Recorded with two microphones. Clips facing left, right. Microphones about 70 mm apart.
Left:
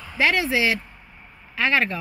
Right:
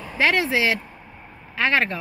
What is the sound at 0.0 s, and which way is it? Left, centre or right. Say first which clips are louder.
A woman's voice: right 1 dB; right.